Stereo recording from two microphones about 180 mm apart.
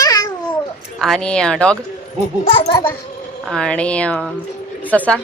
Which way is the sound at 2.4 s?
30° left (ahead or behind).